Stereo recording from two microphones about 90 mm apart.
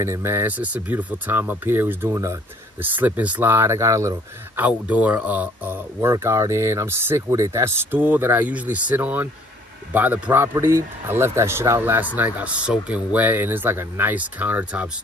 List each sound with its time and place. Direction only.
0.0 s speech: 30° right (ahead or behind)
2.8 s speech: 20° right (ahead or behind)
4.6 s speech: 15° right (ahead or behind)